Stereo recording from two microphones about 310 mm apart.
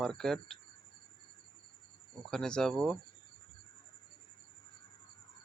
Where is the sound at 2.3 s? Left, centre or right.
Centre.